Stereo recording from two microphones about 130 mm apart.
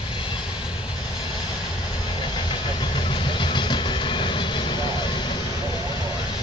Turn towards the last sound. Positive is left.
turn(degrees=40)  # may be behind; listen again after turning